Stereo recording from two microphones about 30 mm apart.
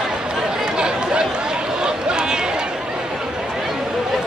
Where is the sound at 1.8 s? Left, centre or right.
Right.